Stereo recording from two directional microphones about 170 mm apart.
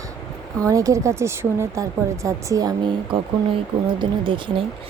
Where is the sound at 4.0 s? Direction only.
30° right (ahead or behind).